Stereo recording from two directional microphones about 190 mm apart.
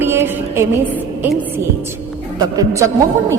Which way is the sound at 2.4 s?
15° right (ahead or behind).